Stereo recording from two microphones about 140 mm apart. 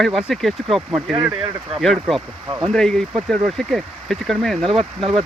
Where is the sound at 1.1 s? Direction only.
10° right (ahead or behind).